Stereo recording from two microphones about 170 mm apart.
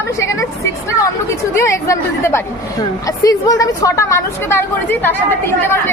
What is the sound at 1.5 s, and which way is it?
A woman's voice, 15° left (ahead or behind).